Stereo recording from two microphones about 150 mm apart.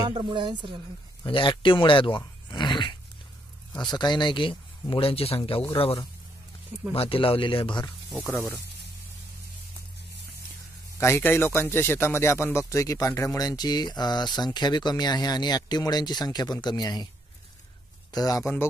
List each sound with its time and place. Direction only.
0.1 s speech: 30° right (ahead or behind)
1.2 s speech: 35° left (ahead or behind)
6.9 s speech: 40° left (ahead or behind)
8.1 s speech: centre (ahead or behind)
11.0 s speech: 15° left (ahead or behind)
18.1 s speech: 25° left (ahead or behind)